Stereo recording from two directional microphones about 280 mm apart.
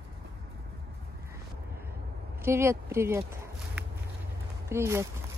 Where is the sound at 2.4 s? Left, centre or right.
Centre.